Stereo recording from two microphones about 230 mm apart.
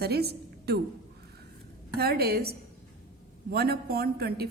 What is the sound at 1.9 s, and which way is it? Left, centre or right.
A woman's voice, right.